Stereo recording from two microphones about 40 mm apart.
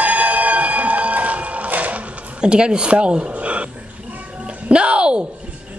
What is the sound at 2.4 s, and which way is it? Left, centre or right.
Speech, right.